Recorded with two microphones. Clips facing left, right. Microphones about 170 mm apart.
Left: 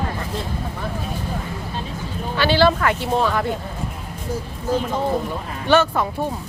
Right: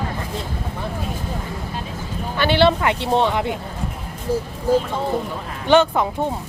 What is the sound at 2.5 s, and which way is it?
A woman's voice, 20° right (ahead or behind).